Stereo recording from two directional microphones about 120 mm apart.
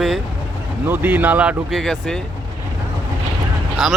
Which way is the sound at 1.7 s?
Centre (ahead or behind).